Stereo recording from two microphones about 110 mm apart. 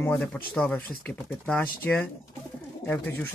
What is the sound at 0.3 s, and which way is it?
Speech, 10° left (ahead or behind).